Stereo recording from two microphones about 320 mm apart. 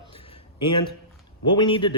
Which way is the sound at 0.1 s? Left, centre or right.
Centre.